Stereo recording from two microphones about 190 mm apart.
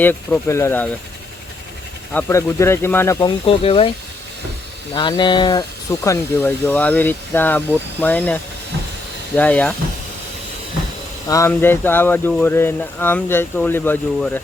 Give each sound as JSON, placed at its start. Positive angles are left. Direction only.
{"t": 0.0, "sound": "speech", "side_deg": 10}
{"t": 2.1, "sound": "speech", "side_deg": 15}
{"t": 3.4, "sound": "speech", "side_deg": 30}
{"t": 4.9, "sound": "speech", "side_deg": 25}
{"t": 11.3, "sound": "speech", "side_deg": 15}